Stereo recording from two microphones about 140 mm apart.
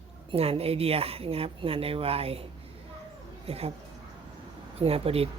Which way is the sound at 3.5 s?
45° right (ahead or behind).